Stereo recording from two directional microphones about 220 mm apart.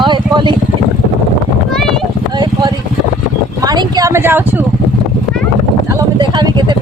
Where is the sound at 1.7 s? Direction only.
Centre (ahead or behind).